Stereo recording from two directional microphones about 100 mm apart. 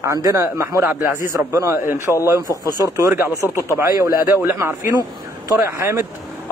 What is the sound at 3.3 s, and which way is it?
Speech, 30° left (ahead or behind).